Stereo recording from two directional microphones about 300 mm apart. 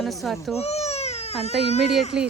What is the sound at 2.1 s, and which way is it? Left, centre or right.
Speech, centre.